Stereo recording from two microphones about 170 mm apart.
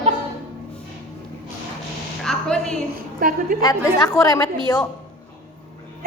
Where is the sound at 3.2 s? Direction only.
55° right (ahead or behind).